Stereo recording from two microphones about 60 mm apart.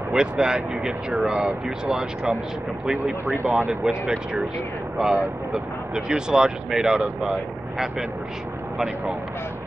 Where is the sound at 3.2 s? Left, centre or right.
Right.